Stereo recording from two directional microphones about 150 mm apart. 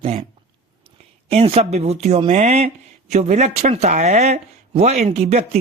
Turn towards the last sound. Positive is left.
turn(degrees=-45)  # may be behind; listen again after turning